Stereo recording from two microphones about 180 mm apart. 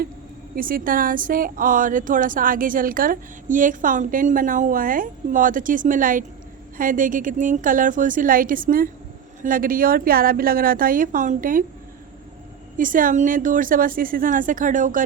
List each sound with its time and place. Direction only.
0.5 s speech: 50° right (ahead or behind)
12.7 s speech: 50° right (ahead or behind)